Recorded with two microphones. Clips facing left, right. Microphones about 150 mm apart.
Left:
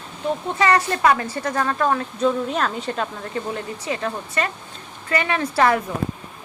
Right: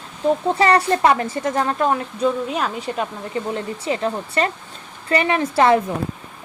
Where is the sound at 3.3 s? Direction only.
25° right (ahead or behind).